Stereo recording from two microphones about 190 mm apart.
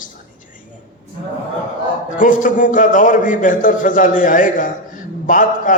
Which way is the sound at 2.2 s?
45° left (ahead or behind).